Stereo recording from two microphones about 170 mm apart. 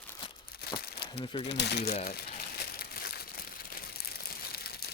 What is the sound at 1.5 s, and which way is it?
Speech, 80° left.